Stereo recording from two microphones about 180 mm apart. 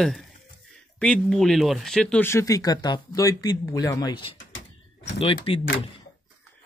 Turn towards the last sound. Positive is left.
turn(degrees=30)  # may be behind; listen again after turning